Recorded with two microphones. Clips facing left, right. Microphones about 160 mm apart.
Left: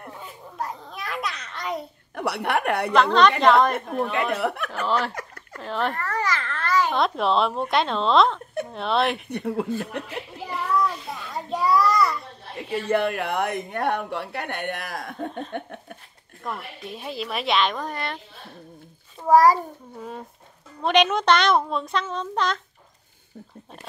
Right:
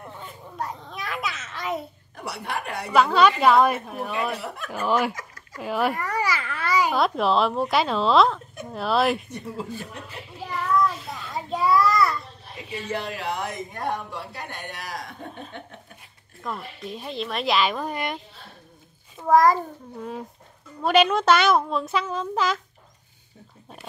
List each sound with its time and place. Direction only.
0.0 s babbling: centre (ahead or behind)
2.1 s speech: 65° left (ahead or behind)
2.9 s a child's voice: 10° right (ahead or behind)
4.4 s speech: 65° left (ahead or behind)
4.8 s a child's voice: 10° right (ahead or behind)
5.1 s a sound: 60° left (ahead or behind)
5.6 s a child's voice: 10° right (ahead or behind)
9.3 s speech: 65° left (ahead or behind)
10.4 s child singing: centre (ahead or behind)
12.4 s speech: 60° left (ahead or behind)
15.5 s laughter: 55° left (ahead or behind)
16.4 s speech: centre (ahead or behind)
19.2 s a sound: 10° left (ahead or behind)
20.8 s speech: 5° right (ahead or behind)